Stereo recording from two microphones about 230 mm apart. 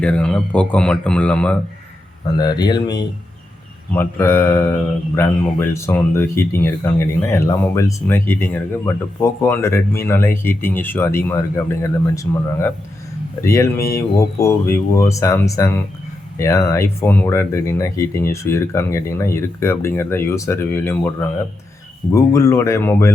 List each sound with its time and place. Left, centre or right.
0.0 s speech: centre
2.4 s speech: centre